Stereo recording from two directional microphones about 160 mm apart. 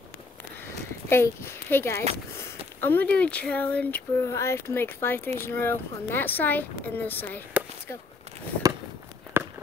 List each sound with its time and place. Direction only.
1.0 s speech: 15° left (ahead or behind)
9.3 s walk: 15° right (ahead or behind)